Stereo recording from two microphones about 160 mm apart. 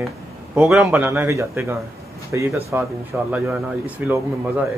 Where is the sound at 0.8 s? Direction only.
15° right (ahead or behind).